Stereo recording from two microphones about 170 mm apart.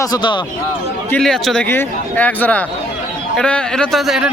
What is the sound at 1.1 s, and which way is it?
A man's voice, 5° left (ahead or behind).